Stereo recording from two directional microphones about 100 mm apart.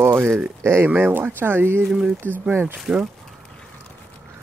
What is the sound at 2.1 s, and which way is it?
Speech, 20° right (ahead or behind).